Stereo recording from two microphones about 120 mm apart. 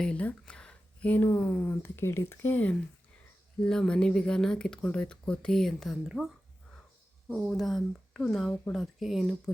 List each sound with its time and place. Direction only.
0.0 s speech: 10° left (ahead or behind)
7.3 s speech: centre (ahead or behind)